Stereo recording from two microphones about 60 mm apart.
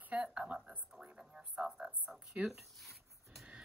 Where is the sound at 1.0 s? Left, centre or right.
Centre.